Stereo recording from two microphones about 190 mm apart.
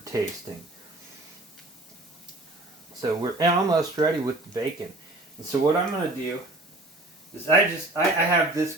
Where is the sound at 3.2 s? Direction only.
20° right (ahead or behind).